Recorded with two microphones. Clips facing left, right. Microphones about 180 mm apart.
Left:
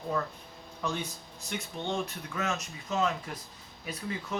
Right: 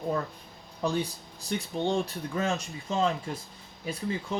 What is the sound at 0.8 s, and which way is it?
Speech, 35° right (ahead or behind).